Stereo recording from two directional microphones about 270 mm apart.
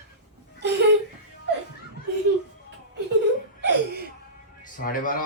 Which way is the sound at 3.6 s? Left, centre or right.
Right.